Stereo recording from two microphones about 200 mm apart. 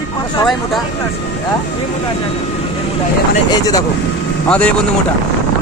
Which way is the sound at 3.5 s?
20° left (ahead or behind).